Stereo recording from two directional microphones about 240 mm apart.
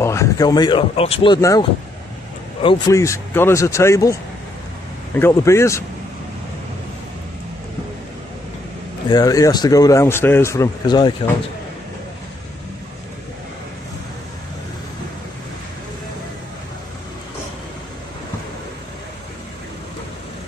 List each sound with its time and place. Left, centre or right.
0.0 s a man's voice: centre
9.1 s a man's voice: centre